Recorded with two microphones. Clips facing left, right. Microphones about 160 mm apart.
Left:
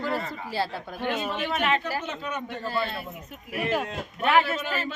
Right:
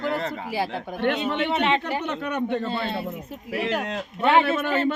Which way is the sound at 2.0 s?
60° right (ahead or behind).